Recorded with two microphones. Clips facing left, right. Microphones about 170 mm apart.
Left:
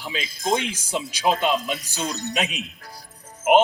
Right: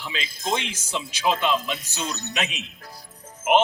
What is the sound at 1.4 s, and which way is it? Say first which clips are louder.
Speech: left 1 dB; 45° left (ahead or behind).